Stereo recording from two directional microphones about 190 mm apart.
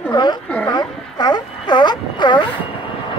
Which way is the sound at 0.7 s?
20° left (ahead or behind).